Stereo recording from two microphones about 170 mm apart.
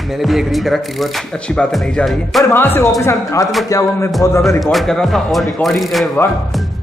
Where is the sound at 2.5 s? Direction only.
10° left (ahead or behind).